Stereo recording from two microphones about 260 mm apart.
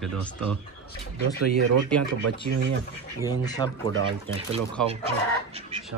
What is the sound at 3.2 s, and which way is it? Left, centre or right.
Speech, centre.